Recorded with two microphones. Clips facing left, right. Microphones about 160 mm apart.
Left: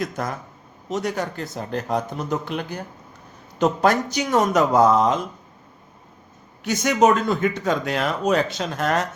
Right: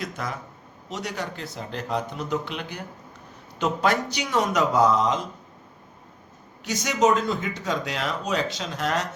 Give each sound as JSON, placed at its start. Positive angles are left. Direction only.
{"t": 0.0, "sound": "speech", "side_deg": 45}
{"t": 6.7, "sound": "speech", "side_deg": 55}